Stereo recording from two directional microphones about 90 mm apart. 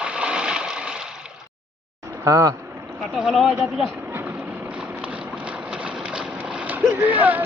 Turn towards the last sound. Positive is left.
turn(degrees=-20)  # may be behind; listen again after turning